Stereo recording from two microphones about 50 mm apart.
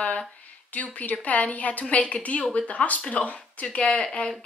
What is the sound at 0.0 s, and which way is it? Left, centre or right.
A woman's voice, left.